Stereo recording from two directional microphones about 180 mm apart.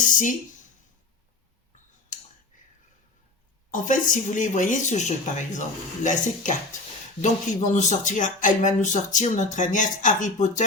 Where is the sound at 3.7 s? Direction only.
45° left (ahead or behind).